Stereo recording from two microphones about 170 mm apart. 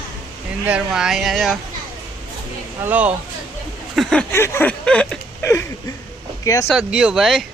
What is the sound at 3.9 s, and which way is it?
Speech, centre (ahead or behind).